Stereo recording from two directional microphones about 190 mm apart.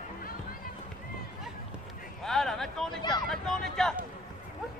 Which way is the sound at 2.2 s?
Centre (ahead or behind).